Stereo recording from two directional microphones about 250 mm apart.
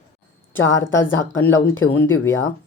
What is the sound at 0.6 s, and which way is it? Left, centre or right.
Speech, left.